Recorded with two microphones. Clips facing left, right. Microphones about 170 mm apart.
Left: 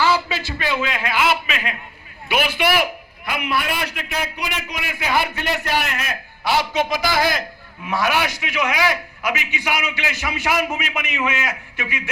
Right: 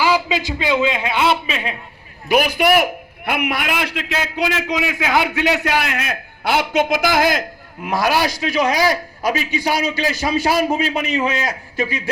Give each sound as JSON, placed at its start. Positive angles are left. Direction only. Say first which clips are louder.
{"t": 0.0, "sound": "a man's voice", "louder": "right 2 dB", "side_deg": -15}
{"t": 2.3, "sound": "a man's voice", "louder": "right 5 dB", "side_deg": -40}
{"t": 6.4, "sound": "a man's voice", "louder": "right 3 dB", "side_deg": -55}